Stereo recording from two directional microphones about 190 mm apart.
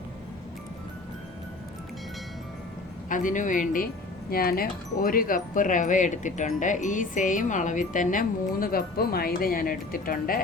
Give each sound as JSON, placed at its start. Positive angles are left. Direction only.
{"t": 3.1, "sound": "speech", "side_deg": 45}